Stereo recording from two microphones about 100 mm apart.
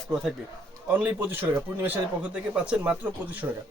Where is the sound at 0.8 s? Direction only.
15° right (ahead or behind).